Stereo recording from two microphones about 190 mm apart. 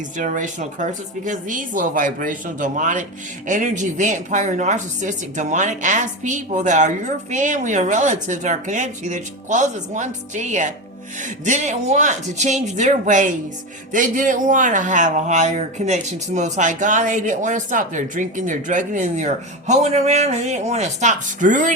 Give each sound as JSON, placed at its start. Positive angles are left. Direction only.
{"t": 0.2, "sound": "speech", "side_deg": -40}